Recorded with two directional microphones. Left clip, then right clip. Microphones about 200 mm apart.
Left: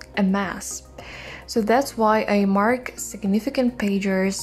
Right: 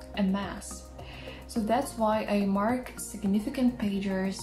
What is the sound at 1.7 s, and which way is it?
Speech, 50° left (ahead or behind).